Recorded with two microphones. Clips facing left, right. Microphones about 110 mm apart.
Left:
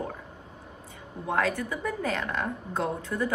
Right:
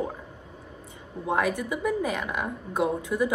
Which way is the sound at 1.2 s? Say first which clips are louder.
Right 1 dB; 15° right (ahead or behind).